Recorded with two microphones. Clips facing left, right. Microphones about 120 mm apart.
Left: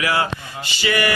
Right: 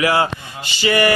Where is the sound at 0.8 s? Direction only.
35° right (ahead or behind).